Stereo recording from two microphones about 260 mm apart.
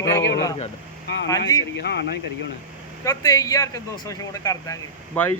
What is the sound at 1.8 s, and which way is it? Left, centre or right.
Speech, left.